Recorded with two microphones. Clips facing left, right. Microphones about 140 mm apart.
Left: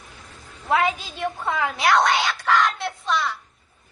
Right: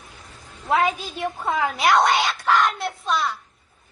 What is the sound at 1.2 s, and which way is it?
A woman's voice, 20° right (ahead or behind).